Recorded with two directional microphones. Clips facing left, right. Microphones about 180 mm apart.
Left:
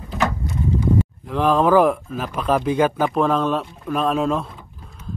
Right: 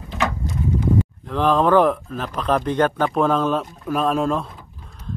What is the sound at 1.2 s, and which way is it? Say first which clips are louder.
A man's voice: left 1 dB; 5° left (ahead or behind).